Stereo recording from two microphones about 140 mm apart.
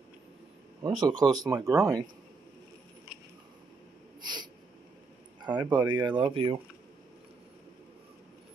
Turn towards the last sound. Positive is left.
turn(degrees=-40)  # may be behind; listen again after turning